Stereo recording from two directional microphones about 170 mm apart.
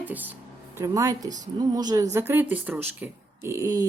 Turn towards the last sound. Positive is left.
turn(degrees=-20)  # may be behind; listen again after turning